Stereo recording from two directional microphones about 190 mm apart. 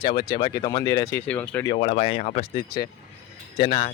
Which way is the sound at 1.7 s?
30° left (ahead or behind).